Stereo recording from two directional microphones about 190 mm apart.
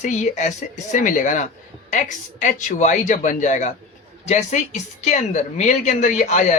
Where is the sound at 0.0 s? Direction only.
40° left (ahead or behind).